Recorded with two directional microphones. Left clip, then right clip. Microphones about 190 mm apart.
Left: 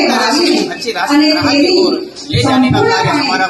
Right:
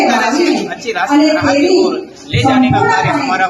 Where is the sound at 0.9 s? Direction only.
5° right (ahead or behind).